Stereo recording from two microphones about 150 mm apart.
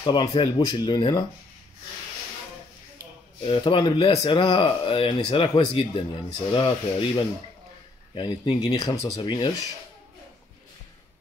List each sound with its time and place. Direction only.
0.0 s speech: 35° left (ahead or behind)
3.4 s speech: 35° left (ahead or behind)